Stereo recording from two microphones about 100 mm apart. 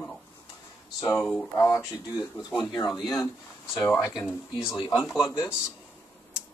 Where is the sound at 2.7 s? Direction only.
45° left (ahead or behind).